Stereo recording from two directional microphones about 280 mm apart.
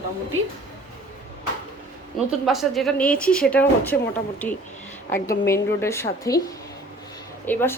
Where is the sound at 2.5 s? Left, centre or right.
Centre.